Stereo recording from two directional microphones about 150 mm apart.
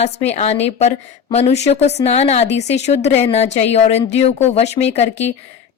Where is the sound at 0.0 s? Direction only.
45° left (ahead or behind).